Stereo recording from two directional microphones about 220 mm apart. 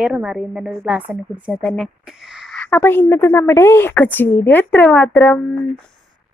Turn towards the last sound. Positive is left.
turn(degrees=10)  # may be behind; listen again after turning